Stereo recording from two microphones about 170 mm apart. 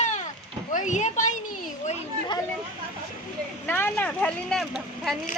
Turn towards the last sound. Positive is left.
turn(degrees=0)  # may be behind; listen again after turning